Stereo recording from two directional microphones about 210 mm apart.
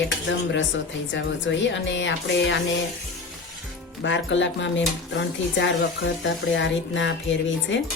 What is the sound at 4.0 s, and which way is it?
Speech, 60° left (ahead or behind).